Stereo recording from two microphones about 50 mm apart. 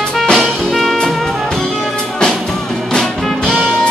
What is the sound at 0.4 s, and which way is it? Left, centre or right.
Music, centre.